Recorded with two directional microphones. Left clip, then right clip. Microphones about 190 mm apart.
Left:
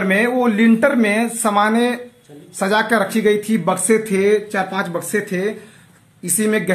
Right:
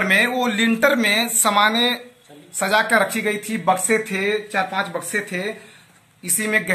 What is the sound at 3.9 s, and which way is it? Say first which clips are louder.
Speech: left 5 dB; 55° left (ahead or behind).